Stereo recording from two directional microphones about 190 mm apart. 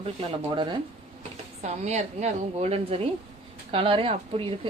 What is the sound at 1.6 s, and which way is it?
A woman's voice, 35° right (ahead or behind).